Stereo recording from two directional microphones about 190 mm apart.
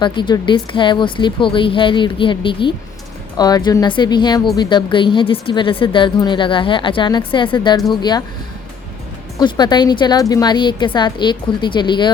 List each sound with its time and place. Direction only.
0.0 s a woman's voice: 25° left (ahead or behind)
9.4 s a woman's voice: 25° left (ahead or behind)